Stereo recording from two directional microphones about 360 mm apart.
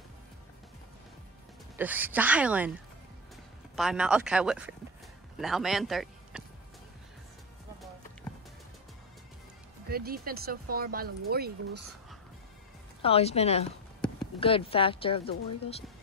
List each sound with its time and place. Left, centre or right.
1.8 s speech: centre
3.7 s speech: centre
9.8 s speech: right
13.0 s speech: centre